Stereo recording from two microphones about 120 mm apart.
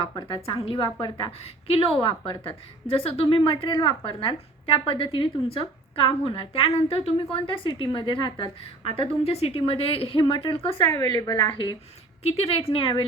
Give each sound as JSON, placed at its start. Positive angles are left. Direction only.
{"t": 0.0, "sound": "a woman's voice", "side_deg": 40}
{"t": 1.6, "sound": "a woman's voice", "side_deg": 50}
{"t": 10.8, "sound": "a woman's voice", "side_deg": 30}
{"t": 12.2, "sound": "a woman's voice", "side_deg": 55}